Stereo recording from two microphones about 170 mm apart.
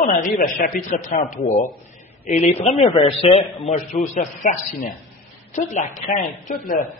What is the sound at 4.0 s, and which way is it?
Speech, 55° left (ahead or behind).